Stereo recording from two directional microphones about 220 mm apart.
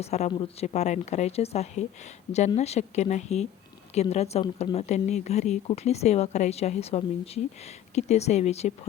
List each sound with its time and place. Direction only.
0.0 s speech: 30° left (ahead or behind)